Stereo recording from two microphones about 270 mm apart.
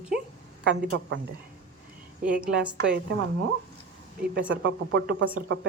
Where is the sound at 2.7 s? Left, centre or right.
Right.